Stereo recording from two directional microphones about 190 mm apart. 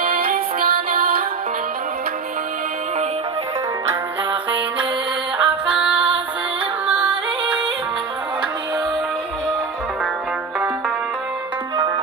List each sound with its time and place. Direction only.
0.3 s music: 50° right (ahead or behind)
5.4 s music: 5° right (ahead or behind)